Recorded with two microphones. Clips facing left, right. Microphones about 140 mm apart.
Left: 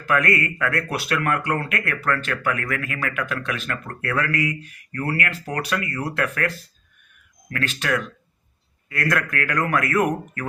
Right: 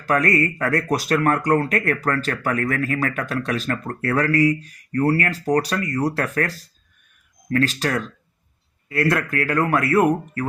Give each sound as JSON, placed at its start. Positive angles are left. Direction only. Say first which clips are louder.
{"t": 0.0, "sound": "speech", "louder": "right 2 dB", "side_deg": -35}